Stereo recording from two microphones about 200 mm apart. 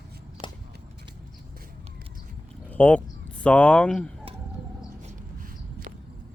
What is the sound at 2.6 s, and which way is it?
Speech, 10° left (ahead or behind).